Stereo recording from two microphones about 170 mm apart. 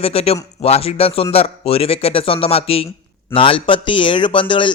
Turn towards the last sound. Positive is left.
turn(degrees=30)  # may be behind; listen again after turning